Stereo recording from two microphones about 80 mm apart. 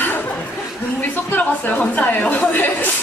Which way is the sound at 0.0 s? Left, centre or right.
Left.